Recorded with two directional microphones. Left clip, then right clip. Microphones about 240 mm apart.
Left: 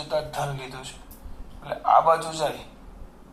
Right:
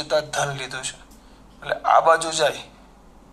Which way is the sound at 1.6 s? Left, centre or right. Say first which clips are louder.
Right 2 dB; right.